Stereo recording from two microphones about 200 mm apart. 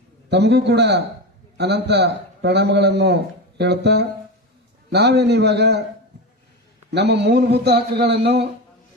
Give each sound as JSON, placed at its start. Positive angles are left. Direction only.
{"t": 0.3, "sound": "a man's voice", "side_deg": -55}
{"t": 6.9, "sound": "a man's voice", "side_deg": -55}